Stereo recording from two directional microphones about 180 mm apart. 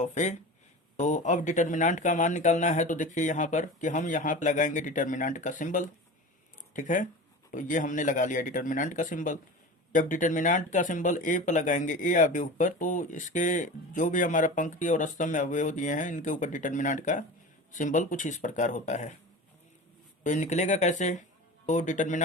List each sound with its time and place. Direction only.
0.0 s speech: 40° left (ahead or behind)
20.2 s speech: 40° left (ahead or behind)